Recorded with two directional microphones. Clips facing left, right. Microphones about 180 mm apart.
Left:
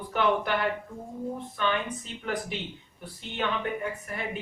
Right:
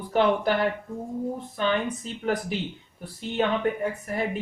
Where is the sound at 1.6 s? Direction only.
40° right (ahead or behind).